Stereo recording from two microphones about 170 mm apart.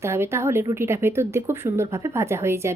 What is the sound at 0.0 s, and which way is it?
Speech, 15° right (ahead or behind).